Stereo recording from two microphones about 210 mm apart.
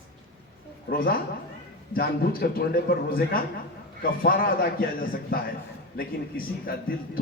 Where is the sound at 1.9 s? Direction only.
45° left (ahead or behind).